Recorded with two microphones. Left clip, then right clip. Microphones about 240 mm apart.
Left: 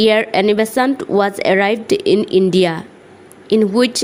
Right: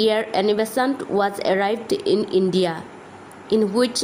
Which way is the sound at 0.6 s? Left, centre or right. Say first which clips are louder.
Left 6 dB; left.